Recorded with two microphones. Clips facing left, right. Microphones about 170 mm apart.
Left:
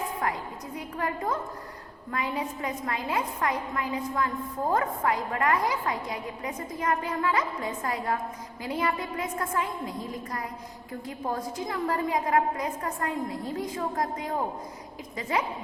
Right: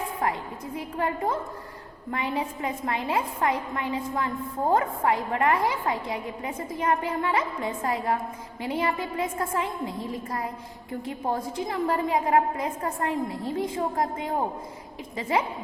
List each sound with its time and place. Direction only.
0.2 s a woman's voice: 30° right (ahead or behind)